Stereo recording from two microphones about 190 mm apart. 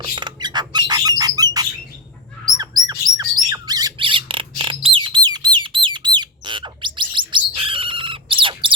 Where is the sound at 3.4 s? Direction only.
20° right (ahead or behind).